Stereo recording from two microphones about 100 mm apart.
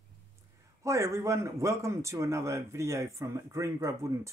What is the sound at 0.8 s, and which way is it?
A man's voice, 30° right (ahead or behind).